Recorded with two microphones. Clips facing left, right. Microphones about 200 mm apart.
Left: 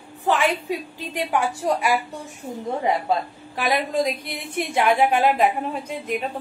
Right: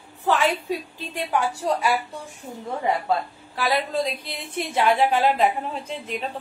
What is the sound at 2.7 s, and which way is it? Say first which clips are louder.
A woman's voice: left 1 dB; 15° left (ahead or behind).